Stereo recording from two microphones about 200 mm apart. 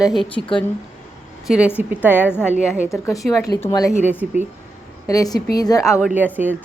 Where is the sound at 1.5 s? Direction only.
5° right (ahead or behind).